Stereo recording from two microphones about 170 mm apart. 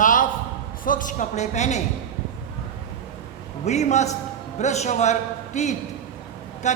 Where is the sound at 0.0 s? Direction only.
50° left (ahead or behind).